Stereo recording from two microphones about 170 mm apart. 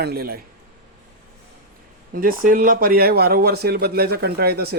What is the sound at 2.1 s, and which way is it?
Speech, 55° right (ahead or behind).